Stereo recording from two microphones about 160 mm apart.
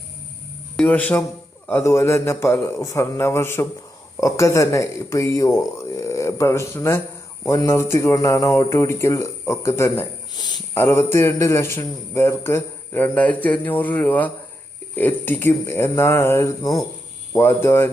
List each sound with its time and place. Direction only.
0.8 s a man's voice: 10° left (ahead or behind)